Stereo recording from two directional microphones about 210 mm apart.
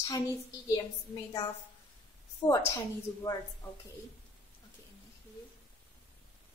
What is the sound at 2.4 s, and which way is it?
Speech, 15° left (ahead or behind).